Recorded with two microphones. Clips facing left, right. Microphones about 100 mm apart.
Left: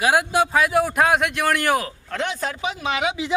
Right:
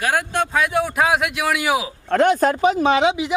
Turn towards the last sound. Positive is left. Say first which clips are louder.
# right 7 dB
turn(degrees=-20)  # may be behind; listen again after turning